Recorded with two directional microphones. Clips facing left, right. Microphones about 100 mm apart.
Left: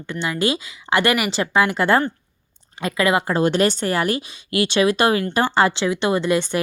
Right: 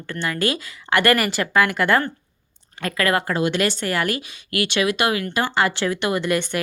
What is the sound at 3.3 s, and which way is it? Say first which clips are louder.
A woman's voice: left 3 dB; 35° left (ahead or behind).